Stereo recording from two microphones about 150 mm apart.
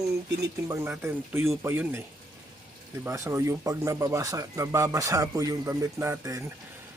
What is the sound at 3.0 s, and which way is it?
Speech, 20° right (ahead or behind).